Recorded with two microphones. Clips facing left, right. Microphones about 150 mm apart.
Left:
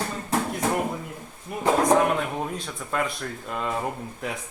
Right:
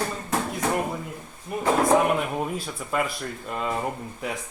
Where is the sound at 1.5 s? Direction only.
Centre (ahead or behind).